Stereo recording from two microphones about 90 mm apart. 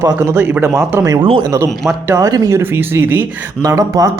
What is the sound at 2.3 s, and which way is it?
Speech, 45° right (ahead or behind).